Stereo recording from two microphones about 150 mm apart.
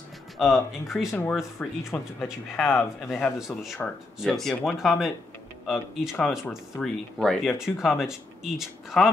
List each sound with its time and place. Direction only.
0.4 s speech: centre (ahead or behind)
2.6 s speech: 15° left (ahead or behind)
3.0 s speech: centre (ahead or behind)